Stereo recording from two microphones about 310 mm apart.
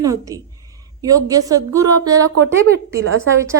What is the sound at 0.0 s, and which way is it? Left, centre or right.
A woman's voice, centre.